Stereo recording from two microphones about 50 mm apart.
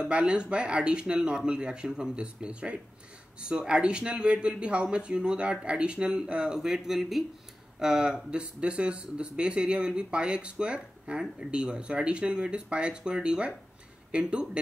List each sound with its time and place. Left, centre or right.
0.0 s speech: right